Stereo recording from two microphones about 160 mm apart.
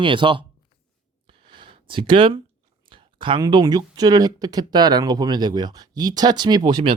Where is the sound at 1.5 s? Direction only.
30° right (ahead or behind).